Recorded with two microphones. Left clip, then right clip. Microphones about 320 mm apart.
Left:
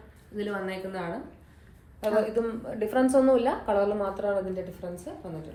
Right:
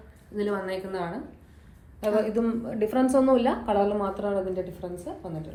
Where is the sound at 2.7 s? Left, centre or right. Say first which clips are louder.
Even; right.